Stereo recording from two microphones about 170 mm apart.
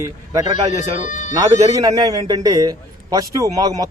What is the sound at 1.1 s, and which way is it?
Speech, 45° left (ahead or behind).